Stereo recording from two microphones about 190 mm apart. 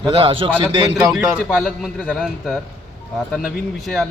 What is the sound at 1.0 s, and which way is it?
A man's voice, centre (ahead or behind).